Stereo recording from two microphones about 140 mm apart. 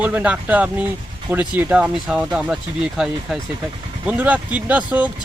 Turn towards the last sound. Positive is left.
turn(degrees=-10)  # may be behind; listen again after turning